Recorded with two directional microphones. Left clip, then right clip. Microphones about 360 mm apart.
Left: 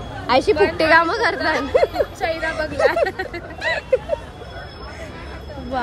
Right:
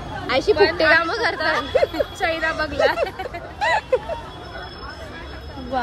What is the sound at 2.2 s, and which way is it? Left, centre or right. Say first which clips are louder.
Speech: right 1 dB; right.